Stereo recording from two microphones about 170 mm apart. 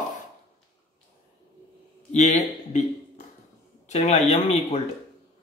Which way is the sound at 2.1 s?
40° left (ahead or behind).